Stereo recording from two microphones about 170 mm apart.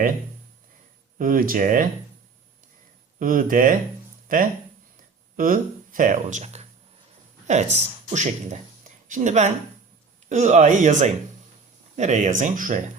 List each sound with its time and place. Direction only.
1.2 s speech: 55° right (ahead or behind)
3.2 s speech: 55° right (ahead or behind)
5.4 s speech: 55° right (ahead or behind)